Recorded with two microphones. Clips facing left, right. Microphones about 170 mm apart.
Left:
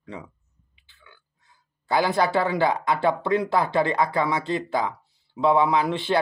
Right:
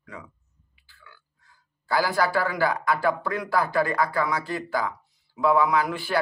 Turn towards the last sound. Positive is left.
turn(degrees=25)  # may be behind; listen again after turning